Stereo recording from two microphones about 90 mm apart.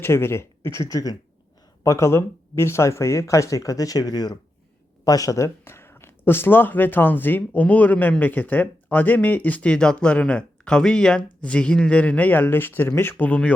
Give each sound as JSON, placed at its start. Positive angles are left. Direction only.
{"t": 0.0, "sound": "speech", "side_deg": 25}
{"t": 5.6, "sound": "speech", "side_deg": 25}